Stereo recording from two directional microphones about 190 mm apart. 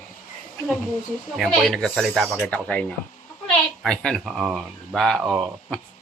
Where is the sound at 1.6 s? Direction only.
Centre (ahead or behind).